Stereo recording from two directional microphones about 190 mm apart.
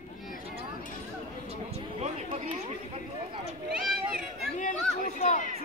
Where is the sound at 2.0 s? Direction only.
30° right (ahead or behind).